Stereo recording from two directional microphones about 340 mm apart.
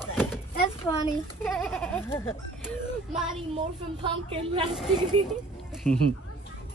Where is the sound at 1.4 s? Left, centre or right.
Centre.